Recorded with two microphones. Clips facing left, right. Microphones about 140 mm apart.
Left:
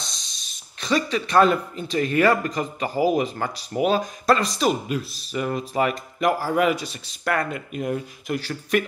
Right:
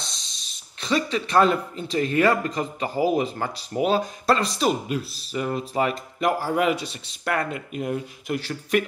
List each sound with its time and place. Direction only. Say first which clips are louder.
0.0 s speech: even; 30° right (ahead or behind)